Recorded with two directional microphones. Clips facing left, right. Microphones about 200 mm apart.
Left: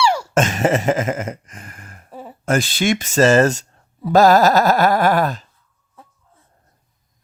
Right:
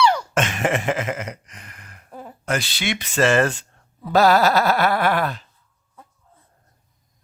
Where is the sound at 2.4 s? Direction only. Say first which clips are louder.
Left 7 dB; 45° left (ahead or behind).